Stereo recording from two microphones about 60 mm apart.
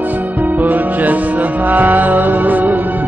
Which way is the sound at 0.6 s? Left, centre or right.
Right.